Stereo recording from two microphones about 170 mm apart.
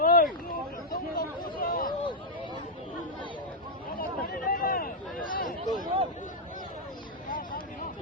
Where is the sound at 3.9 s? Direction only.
60° left (ahead or behind).